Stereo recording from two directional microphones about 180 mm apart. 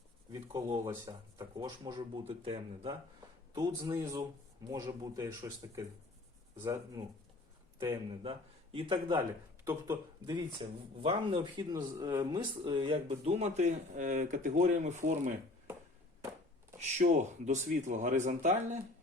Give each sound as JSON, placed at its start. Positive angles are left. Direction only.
{"t": 0.3, "sound": "speech", "side_deg": -25}
{"t": 3.5, "sound": "speech", "side_deg": -20}
{"t": 8.2, "sound": "speech", "side_deg": -30}
{"t": 9.6, "sound": "speech", "side_deg": -15}
{"t": 17.0, "sound": "speech", "side_deg": -40}